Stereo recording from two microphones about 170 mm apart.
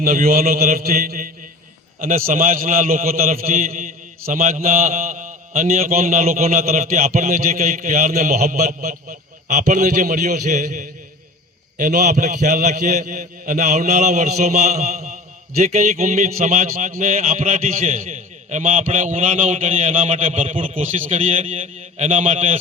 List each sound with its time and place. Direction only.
0.0 s a man's voice: 60° right (ahead or behind)
3.1 s a man's voice: 40° right (ahead or behind)
3.3 s a man's voice: 55° right (ahead or behind); by 5.9 s 40° right (ahead or behind)
5.9 s a man's voice: 50° right (ahead or behind)